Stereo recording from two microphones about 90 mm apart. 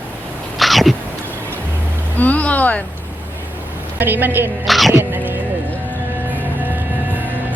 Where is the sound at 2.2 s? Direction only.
15° left (ahead or behind).